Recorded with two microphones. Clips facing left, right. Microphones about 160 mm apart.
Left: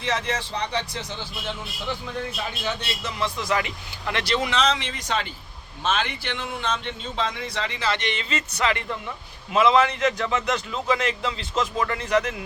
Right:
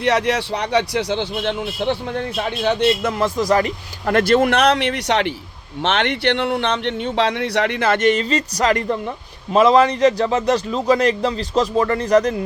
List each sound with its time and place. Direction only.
0.0 s a man's voice: 70° right (ahead or behind); by 12.4 s 40° right (ahead or behind)